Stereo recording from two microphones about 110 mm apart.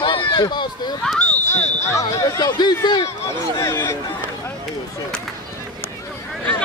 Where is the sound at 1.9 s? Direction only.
25° left (ahead or behind).